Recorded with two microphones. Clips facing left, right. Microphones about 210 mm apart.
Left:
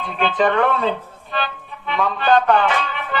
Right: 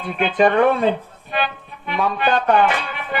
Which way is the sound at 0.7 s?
50° right (ahead or behind).